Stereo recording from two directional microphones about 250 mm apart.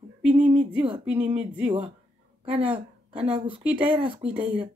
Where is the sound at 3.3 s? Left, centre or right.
Right.